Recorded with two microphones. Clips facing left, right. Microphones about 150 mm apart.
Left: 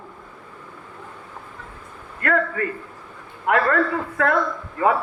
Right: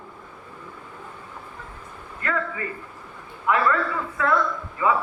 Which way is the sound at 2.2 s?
60° left (ahead or behind).